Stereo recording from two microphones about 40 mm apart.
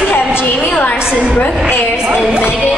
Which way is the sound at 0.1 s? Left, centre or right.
Left.